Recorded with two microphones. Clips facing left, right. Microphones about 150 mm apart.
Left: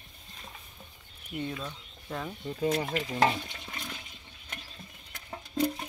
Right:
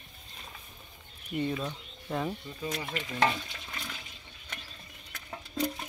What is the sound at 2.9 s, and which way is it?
Speech, 35° left (ahead or behind).